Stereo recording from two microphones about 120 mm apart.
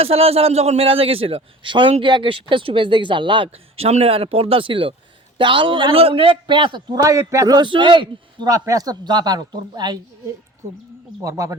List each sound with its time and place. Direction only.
0.0 s a man's voice: 55° right (ahead or behind)
7.0 s a man's voice: 25° right (ahead or behind)
8.5 s a man's voice: 30° right (ahead or behind)
11.2 s speech: 25° right (ahead or behind)